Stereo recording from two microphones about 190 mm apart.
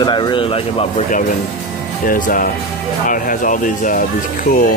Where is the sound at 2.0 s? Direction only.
45° left (ahead or behind).